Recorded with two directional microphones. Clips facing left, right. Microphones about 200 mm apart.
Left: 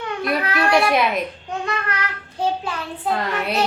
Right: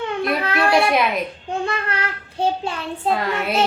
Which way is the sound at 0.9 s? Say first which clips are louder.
Even; centre (ahead or behind).